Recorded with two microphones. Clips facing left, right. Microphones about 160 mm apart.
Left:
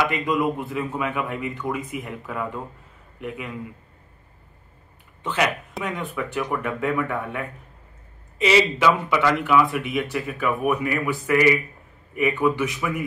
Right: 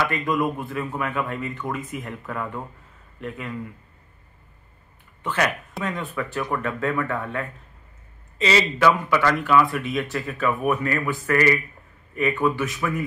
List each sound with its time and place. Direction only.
0.0 s speech: 15° left (ahead or behind)
5.2 s speech: 15° left (ahead or behind)